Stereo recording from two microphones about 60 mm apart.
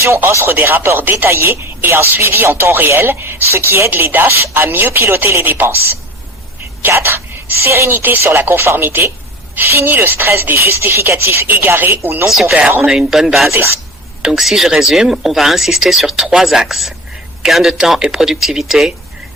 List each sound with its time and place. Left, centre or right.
0.2 s speech: right
1.2 s chopping: right
1.9 s speech: right
4.5 s chopping: right
6.8 s speech: right
9.6 s chopping: right
11.6 s speech: right
12.3 s speech: centre